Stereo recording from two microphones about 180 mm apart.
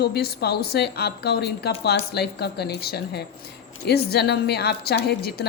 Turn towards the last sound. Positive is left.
turn(degrees=60)  # may be behind; listen again after turning